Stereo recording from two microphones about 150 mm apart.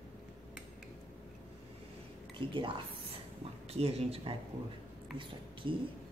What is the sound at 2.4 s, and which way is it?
Speech, 35° right (ahead or behind).